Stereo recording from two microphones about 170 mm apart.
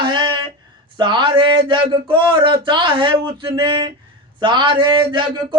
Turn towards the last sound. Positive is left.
turn(degrees=-30)  # may be behind; listen again after turning